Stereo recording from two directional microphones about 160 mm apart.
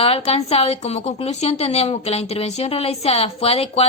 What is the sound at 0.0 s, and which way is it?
A woman's voice, 35° left (ahead or behind).